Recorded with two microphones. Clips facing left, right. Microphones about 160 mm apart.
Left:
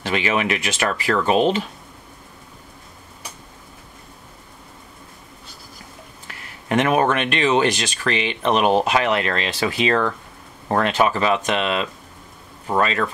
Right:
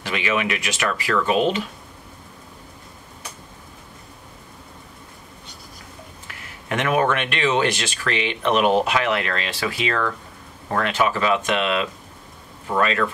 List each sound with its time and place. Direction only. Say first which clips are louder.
0.1 s speech: left 2 dB; 30° left (ahead or behind)
6.7 s speech: left 3 dB; 30° left (ahead or behind)